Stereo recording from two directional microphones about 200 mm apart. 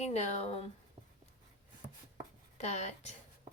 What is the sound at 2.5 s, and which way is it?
Speech, 35° left (ahead or behind).